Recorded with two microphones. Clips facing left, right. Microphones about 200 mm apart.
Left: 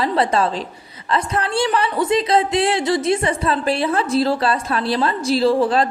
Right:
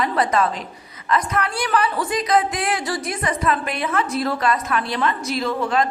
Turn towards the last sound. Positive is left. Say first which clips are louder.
# left 5 dB
turn(degrees=30)  # may be behind; listen again after turning